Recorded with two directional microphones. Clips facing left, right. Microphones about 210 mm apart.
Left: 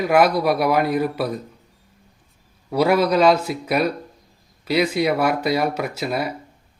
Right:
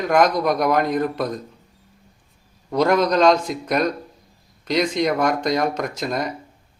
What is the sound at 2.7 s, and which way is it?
A man's voice, 5° left (ahead or behind).